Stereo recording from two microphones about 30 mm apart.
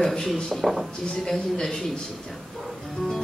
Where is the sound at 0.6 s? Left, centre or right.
Centre.